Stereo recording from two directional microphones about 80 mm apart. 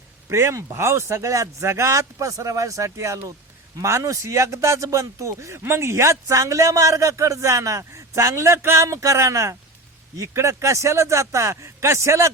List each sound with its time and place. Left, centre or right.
0.3 s speech: right